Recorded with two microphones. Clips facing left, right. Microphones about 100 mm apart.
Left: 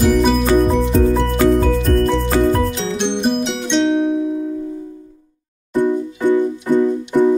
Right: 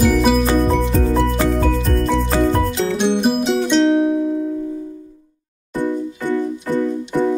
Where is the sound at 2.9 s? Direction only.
5° right (ahead or behind).